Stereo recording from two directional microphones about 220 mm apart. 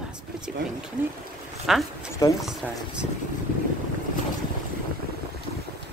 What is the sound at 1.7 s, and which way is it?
Speech, centre (ahead or behind).